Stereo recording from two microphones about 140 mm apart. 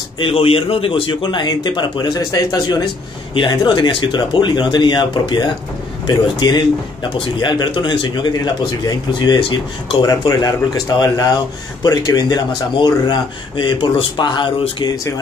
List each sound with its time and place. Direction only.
0.2 s speech: 40° left (ahead or behind)